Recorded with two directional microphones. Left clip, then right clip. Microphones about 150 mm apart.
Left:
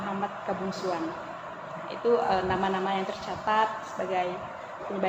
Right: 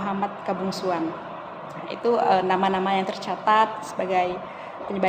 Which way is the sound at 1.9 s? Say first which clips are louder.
Right 4 dB; 55° right (ahead or behind).